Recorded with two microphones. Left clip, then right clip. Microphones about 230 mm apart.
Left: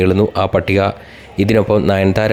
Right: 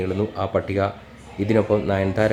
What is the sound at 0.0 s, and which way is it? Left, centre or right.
Speech, left.